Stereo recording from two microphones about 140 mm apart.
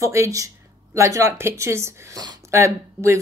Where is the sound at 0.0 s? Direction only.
20° right (ahead or behind).